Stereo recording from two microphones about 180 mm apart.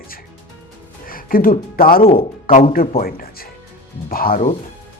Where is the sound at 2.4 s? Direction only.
50° left (ahead or behind).